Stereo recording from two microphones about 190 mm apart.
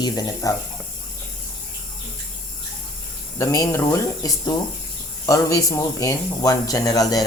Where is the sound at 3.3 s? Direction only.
15° left (ahead or behind).